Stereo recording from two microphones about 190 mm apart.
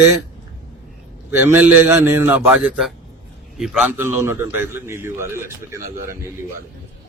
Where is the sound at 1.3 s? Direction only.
10° right (ahead or behind).